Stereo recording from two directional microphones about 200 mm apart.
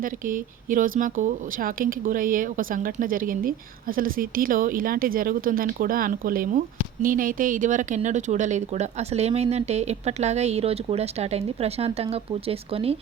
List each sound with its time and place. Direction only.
0.0 s speech: 45° right (ahead or behind)